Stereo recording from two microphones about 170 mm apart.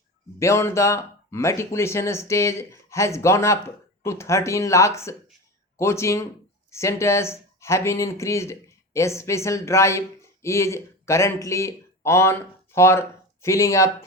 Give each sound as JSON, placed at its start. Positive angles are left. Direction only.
{"t": 0.3, "sound": "speech", "side_deg": 15}